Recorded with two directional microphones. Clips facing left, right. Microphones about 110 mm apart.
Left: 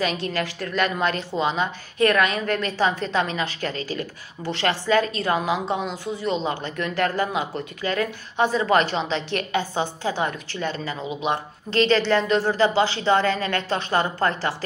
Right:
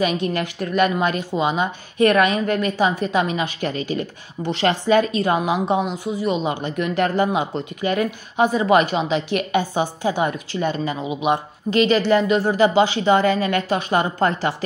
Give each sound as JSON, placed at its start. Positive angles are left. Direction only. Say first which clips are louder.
{"t": 0.0, "sound": "a woman's voice", "louder": "right 4 dB", "side_deg": -20}